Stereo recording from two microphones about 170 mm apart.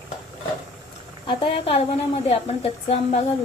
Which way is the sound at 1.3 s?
30° left (ahead or behind).